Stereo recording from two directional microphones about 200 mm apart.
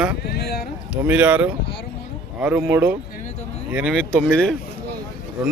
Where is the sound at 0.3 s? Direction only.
55° left (ahead or behind).